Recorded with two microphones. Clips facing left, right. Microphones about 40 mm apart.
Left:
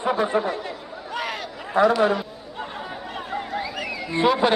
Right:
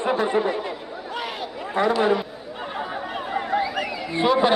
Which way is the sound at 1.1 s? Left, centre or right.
Centre.